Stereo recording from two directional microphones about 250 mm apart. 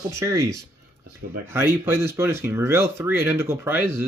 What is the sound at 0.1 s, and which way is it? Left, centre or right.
Speech, centre.